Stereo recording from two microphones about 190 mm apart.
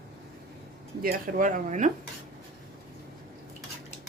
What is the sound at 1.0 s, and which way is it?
Speech, 50° right (ahead or behind).